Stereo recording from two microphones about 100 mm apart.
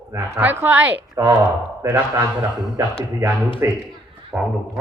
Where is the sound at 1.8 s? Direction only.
30° right (ahead or behind).